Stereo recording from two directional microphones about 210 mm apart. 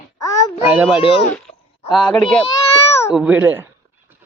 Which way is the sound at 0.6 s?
10° right (ahead or behind).